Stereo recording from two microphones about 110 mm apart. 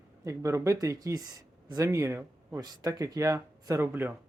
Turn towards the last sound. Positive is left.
turn(degrees=-20)  # may be behind; listen again after turning